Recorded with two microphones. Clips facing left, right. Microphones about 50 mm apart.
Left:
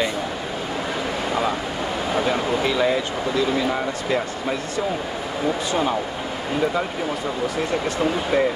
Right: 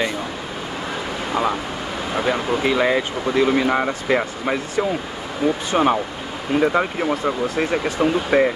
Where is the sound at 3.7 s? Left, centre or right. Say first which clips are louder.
Right 4 dB; right.